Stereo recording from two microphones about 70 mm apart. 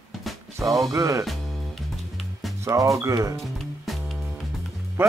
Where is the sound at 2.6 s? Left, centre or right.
Right.